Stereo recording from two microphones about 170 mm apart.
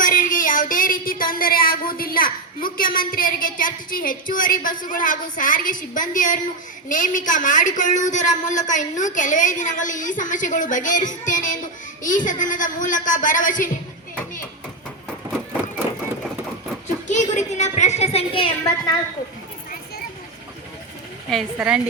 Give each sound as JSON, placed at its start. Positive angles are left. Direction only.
{"t": 0.0, "sound": "child singing", "side_deg": 50}
{"t": 6.8, "sound": "a woman's voice", "side_deg": 50}
{"t": 17.1, "sound": "a sound", "side_deg": 45}
{"t": 21.2, "sound": "a woman's voice", "side_deg": 0}